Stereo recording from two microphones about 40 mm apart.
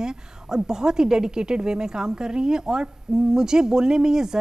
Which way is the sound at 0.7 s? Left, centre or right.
Centre.